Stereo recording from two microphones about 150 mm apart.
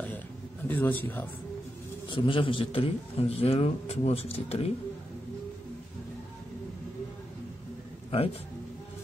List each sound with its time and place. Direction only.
0.7 s a man's voice: 10° left (ahead or behind)
2.0 s a man's voice: 35° left (ahead or behind)
8.1 s a man's voice: 40° left (ahead or behind)